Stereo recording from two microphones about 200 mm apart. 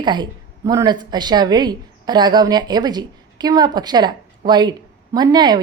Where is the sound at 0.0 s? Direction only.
20° right (ahead or behind).